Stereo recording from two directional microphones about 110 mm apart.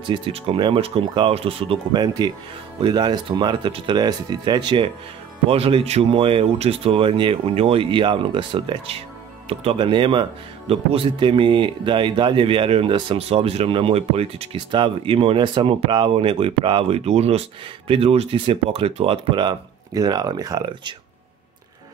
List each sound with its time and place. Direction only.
0.0 s speech: 50° right (ahead or behind)
1.9 s speech: 40° right (ahead or behind)
5.5 s speech: 60° right (ahead or behind)
10.7 s speech: 60° right (ahead or behind)
13.2 s speech: 65° right (ahead or behind)
19.9 s speech: 35° right (ahead or behind)